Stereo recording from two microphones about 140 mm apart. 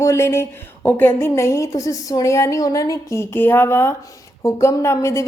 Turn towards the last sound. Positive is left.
turn(degrees=20)  # may be behind; listen again after turning